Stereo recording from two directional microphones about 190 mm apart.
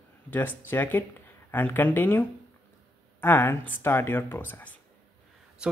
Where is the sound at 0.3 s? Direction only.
10° left (ahead or behind).